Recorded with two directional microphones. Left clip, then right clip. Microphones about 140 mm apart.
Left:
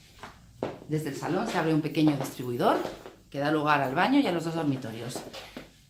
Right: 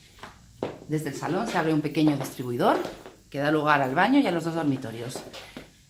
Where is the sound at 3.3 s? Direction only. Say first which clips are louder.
Right 3 dB; 45° right (ahead or behind).